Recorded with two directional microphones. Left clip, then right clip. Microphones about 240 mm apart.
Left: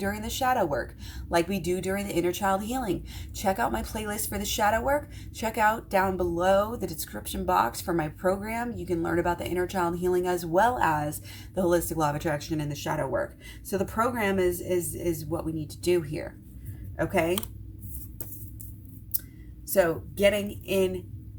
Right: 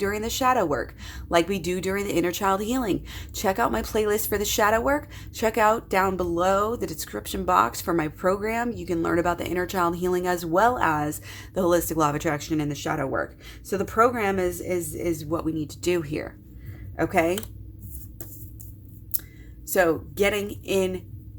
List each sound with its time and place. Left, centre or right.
0.0 s speech: right
19.7 s speech: right